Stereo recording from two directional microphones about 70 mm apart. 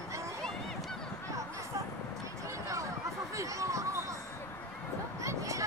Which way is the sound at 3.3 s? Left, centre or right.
Right.